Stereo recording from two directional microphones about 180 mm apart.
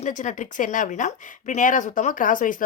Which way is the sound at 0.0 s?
40° left (ahead or behind).